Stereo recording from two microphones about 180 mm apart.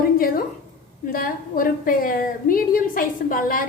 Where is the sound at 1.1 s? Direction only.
50° left (ahead or behind).